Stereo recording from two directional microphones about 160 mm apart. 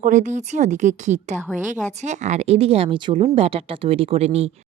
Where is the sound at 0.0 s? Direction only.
50° right (ahead or behind).